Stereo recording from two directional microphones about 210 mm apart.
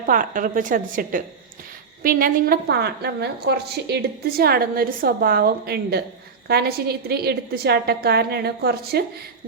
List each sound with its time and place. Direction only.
0.1 s a woman's voice: 40° right (ahead or behind)